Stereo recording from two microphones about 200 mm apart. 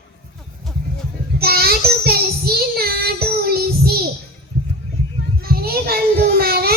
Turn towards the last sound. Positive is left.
turn(degrees=-50)  # may be behind; listen again after turning